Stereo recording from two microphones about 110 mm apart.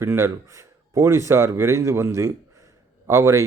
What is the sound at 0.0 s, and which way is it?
Speech, 25° right (ahead or behind).